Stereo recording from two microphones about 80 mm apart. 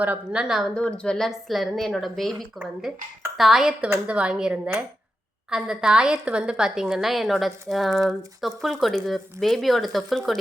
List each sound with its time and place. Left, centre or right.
0.0 s a woman's voice: centre
0.4 s a woman's voice: centre
0.8 s a woman's voice: centre
1.3 s a woman's voice: centre